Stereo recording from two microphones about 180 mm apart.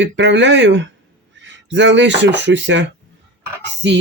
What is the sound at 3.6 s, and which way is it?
Speech, 70° right (ahead or behind).